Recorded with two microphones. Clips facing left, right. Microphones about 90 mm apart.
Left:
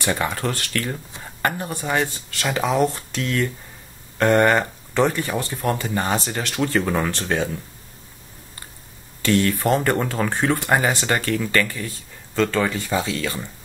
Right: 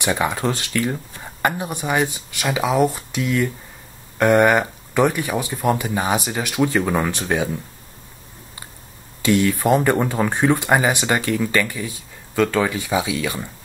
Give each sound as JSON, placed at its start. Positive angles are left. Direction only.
{"t": 0.0, "sound": "speech", "side_deg": -15}
{"t": 9.2, "sound": "speech", "side_deg": -15}